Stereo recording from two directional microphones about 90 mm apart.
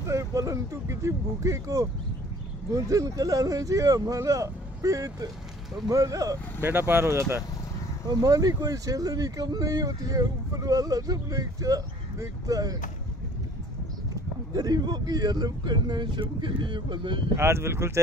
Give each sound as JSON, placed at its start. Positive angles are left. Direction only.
{"t": 0.0, "sound": "speech", "side_deg": -40}
{"t": 6.6, "sound": "speech", "side_deg": -25}
{"t": 8.1, "sound": "speech", "side_deg": -45}
{"t": 14.5, "sound": "speech", "side_deg": -45}
{"t": 17.4, "sound": "speech", "side_deg": -30}